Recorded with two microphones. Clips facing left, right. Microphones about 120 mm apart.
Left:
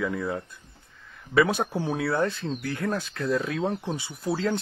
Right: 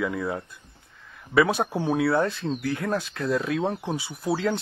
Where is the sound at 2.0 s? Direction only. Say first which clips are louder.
Right 3 dB; 40° right (ahead or behind).